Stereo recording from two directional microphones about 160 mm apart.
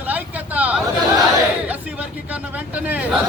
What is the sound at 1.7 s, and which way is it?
Chatter, 10° right (ahead or behind).